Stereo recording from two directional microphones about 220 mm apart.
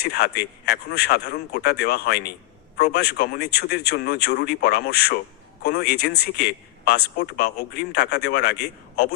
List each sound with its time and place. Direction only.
0.0 s speech: 45° left (ahead or behind)